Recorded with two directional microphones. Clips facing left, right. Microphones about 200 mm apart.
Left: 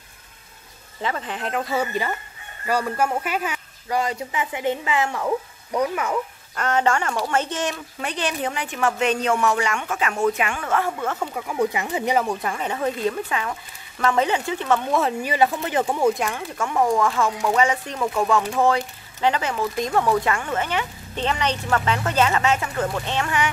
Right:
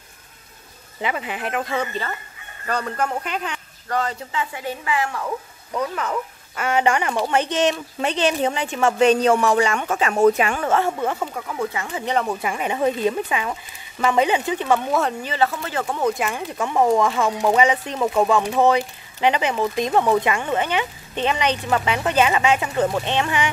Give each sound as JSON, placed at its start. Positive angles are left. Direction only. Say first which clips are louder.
{"t": 1.0, "sound": "speech", "louder": "right 1 dB", "side_deg": -10}
{"t": 5.7, "sound": "speech", "louder": "left 2 dB", "side_deg": 15}
{"t": 6.5, "sound": "speech", "louder": "right 1 dB", "side_deg": -10}
{"t": 11.3, "sound": "speech", "louder": "left 3 dB", "side_deg": 15}
{"t": 12.3, "sound": "speech", "louder": "right 1 dB", "side_deg": -10}
{"t": 14.9, "sound": "speech", "louder": "even", "side_deg": 0}
{"t": 15.2, "sound": "speech", "louder": "left 2 dB", "side_deg": 15}
{"t": 16.1, "sound": "speech", "louder": "left 1 dB", "side_deg": -5}
{"t": 16.3, "sound": "speech", "louder": "right 2 dB", "side_deg": -20}